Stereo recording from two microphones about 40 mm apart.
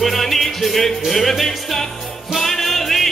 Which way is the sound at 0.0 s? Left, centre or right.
Centre.